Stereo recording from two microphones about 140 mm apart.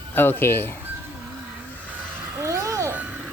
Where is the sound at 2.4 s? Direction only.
20° right (ahead or behind).